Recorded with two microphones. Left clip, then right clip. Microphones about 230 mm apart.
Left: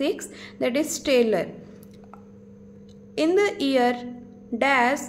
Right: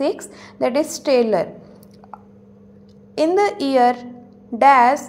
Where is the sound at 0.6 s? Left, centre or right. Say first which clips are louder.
Right 5 dB; centre.